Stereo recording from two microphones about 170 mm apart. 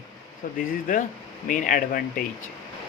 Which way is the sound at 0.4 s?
50° left (ahead or behind).